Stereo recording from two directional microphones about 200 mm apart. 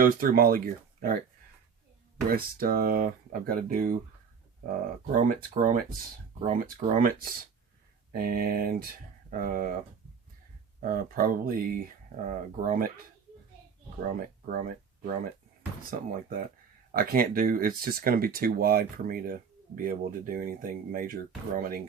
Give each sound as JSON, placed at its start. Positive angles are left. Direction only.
{"t": 0.0, "sound": "speech", "side_deg": -45}
{"t": 2.3, "sound": "speech", "side_deg": -45}
{"t": 10.8, "sound": "speech", "side_deg": -45}
{"t": 14.0, "sound": "speech", "side_deg": -40}